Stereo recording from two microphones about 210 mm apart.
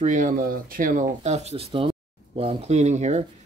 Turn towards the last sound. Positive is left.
turn(degrees=-35)  # may be behind; listen again after turning